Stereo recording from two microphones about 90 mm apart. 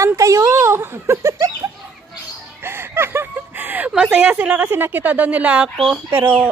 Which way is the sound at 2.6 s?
25° right (ahead or behind).